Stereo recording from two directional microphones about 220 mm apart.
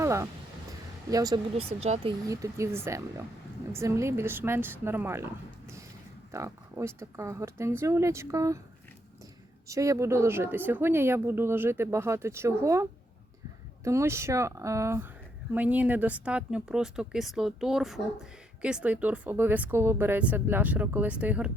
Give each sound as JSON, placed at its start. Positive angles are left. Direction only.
{"t": 0.0, "sound": "a sound", "side_deg": -15}
{"t": 1.1, "sound": "speech", "side_deg": -15}
{"t": 2.2, "sound": "speech", "side_deg": -15}
{"t": 9.6, "sound": "speech", "side_deg": -15}